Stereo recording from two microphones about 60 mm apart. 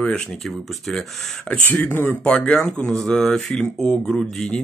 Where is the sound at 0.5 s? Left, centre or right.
Centre.